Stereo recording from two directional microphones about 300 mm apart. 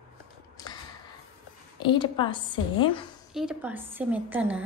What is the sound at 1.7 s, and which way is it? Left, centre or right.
A woman's voice, centre.